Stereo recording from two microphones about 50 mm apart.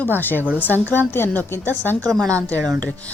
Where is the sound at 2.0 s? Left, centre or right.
Centre.